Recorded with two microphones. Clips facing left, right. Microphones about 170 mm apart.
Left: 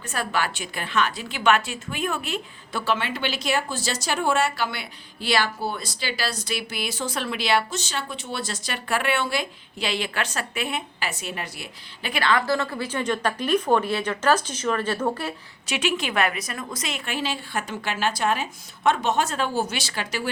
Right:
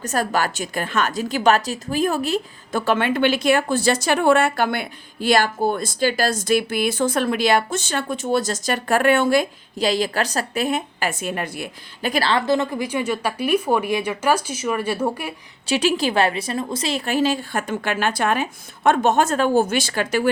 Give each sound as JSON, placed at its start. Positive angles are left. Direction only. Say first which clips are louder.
{"t": 0.0, "sound": "a woman's voice", "louder": "right 5 dB", "side_deg": -40}
{"t": 15.6, "sound": "a woman's voice", "louder": "right 7 dB", "side_deg": -35}